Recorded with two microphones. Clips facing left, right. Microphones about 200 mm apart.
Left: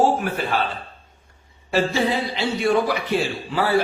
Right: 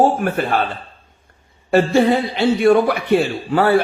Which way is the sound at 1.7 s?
55° right (ahead or behind).